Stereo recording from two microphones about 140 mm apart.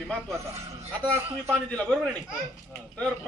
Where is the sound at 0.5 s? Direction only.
50° right (ahead or behind).